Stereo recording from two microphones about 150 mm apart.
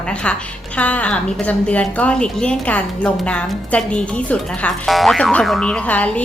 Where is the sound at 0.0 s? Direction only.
5° left (ahead or behind).